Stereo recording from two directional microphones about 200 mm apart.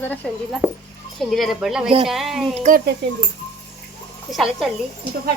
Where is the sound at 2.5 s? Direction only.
40° right (ahead or behind).